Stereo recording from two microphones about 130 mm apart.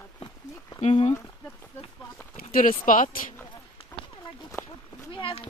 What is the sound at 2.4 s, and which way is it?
Speech, 90° left.